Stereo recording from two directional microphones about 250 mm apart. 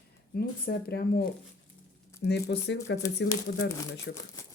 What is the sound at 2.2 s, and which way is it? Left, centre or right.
Speech, left.